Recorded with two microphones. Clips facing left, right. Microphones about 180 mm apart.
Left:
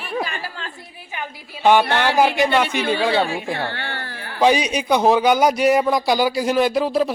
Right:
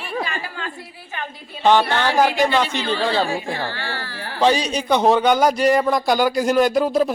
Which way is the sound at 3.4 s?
60° left (ahead or behind).